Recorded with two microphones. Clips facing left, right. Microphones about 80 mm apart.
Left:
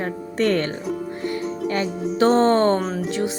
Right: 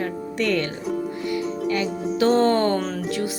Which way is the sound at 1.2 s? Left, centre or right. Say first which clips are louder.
Left 2 dB; left.